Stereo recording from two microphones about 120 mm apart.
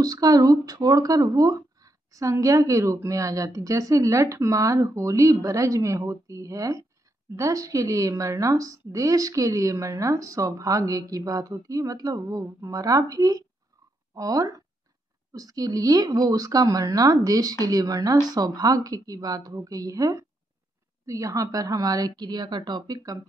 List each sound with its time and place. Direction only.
0.0 s a woman's voice: 30° right (ahead or behind)